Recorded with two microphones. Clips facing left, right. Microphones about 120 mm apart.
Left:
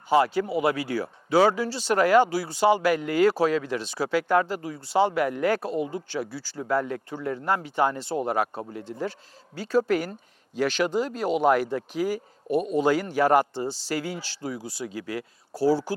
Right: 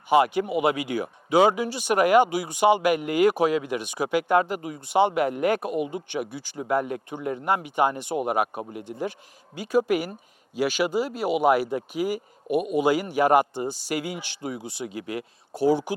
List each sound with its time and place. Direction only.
0.1 s speech: 20° right (ahead or behind)